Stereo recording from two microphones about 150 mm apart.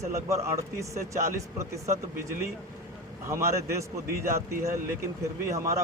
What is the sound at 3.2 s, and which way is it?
Speech, 20° right (ahead or behind).